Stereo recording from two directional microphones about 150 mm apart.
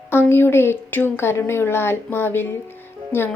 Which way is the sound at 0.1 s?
15° left (ahead or behind).